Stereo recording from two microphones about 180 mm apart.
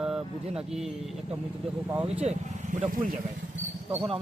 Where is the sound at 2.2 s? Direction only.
40° right (ahead or behind).